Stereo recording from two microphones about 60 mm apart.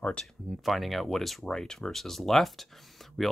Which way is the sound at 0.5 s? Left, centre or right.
Centre.